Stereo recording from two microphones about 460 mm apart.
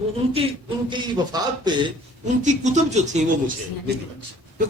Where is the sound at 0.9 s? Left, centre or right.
Centre.